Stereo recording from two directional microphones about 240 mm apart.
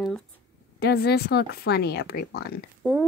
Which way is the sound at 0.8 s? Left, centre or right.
Left.